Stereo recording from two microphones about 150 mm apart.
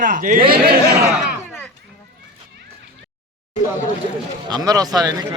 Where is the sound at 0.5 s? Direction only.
85° right.